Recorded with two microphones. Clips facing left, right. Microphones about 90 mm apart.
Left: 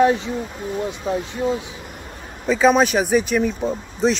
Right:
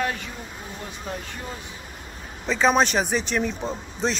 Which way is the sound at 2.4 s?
5° left (ahead or behind).